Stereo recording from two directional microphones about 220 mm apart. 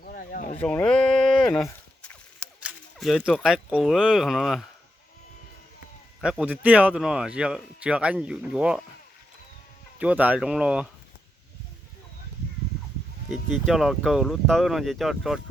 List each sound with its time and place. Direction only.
0.0 s a sound: 40° left (ahead or behind)
0.6 s speech: 5° left (ahead or behind)
1.6 s a sound: 5° left (ahead or behind)
6.2 s speech: 5° right (ahead or behind)
10.0 s speech: 5° right (ahead or behind)
13.5 s speech: centre (ahead or behind)